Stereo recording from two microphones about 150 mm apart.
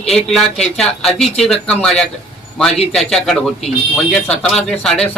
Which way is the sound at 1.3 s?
45° left (ahead or behind).